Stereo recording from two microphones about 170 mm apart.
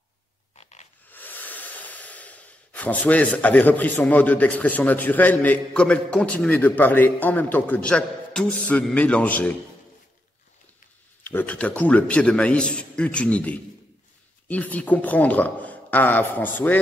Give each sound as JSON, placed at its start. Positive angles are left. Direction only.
{"t": 0.6, "sound": "a sound", "side_deg": 40}
{"t": 1.0, "sound": "speech", "side_deg": 10}
{"t": 11.2, "sound": "a man's voice", "side_deg": 10}